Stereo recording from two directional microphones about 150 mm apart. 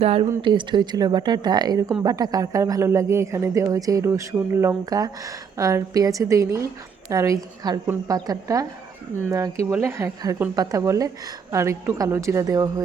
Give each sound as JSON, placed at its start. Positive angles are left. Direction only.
{"t": 0.0, "sound": "speech", "side_deg": -40}
{"t": 9.6, "sound": "speech", "side_deg": -15}